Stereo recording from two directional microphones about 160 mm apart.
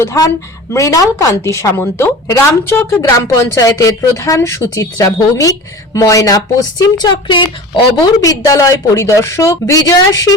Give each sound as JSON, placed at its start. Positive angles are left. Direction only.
{"t": 0.0, "sound": "a woman's voice", "side_deg": 20}